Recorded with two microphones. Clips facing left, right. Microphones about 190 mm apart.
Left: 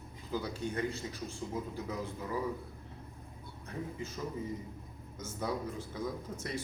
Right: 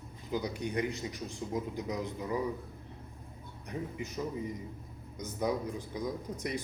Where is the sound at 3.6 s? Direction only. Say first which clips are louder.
Right 2 dB; 15° right (ahead or behind).